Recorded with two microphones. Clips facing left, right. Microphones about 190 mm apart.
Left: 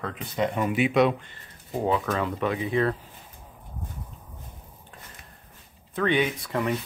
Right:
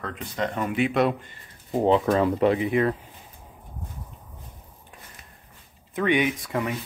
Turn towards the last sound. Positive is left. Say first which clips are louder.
# right 1 dB
turn(degrees=-15)  # may be behind; listen again after turning